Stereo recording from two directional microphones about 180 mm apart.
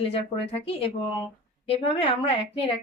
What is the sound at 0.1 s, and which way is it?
A woman's voice, 30° left (ahead or behind).